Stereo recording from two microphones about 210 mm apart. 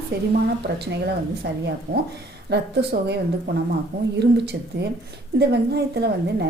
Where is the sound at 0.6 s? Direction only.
50° right (ahead or behind).